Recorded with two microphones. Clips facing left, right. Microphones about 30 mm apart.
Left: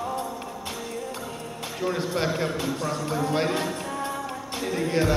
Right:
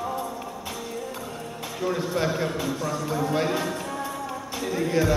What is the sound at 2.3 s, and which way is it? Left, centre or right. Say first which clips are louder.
Speech: even; centre.